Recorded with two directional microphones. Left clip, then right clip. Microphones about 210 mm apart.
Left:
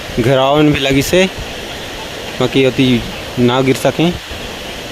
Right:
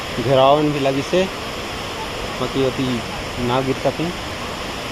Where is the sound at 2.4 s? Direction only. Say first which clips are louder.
Left 10 dB; 40° left (ahead or behind).